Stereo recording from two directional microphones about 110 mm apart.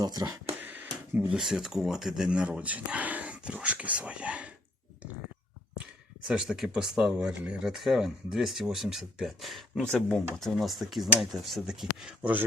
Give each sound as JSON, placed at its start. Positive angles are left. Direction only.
{"t": 0.0, "sound": "speech", "side_deg": -40}
{"t": 0.6, "sound": "a sound", "side_deg": -15}
{"t": 1.4, "sound": "speech", "side_deg": -5}
{"t": 6.2, "sound": "speech", "side_deg": -5}